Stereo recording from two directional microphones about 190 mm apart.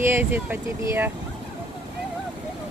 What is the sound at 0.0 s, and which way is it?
Speech, 10° right (ahead or behind).